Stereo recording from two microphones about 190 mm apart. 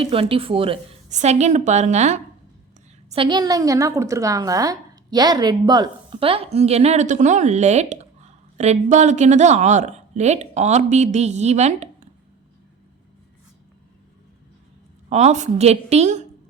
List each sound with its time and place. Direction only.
0.0 s a woman's voice: 30° right (ahead or behind)
3.1 s a woman's voice: 25° right (ahead or behind)
15.1 s a woman's voice: 35° right (ahead or behind)